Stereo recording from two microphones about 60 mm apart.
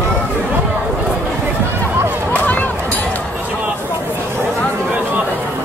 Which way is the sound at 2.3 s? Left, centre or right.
Left.